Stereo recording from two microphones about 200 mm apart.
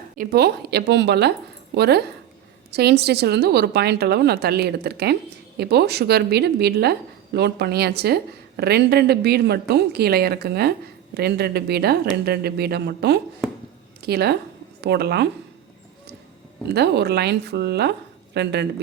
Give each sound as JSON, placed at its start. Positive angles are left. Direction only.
{"t": 0.2, "sound": "a woman's voice", "side_deg": -50}
{"t": 16.6, "sound": "a woman's voice", "side_deg": -55}